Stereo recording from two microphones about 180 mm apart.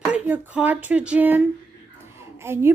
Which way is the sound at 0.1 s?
10° right (ahead or behind).